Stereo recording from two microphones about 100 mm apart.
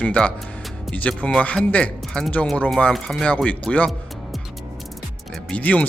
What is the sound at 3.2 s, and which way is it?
Speech, 15° left (ahead or behind).